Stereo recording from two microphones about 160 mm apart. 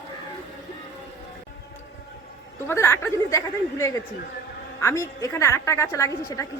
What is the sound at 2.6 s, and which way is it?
A woman's voice, 15° left (ahead or behind).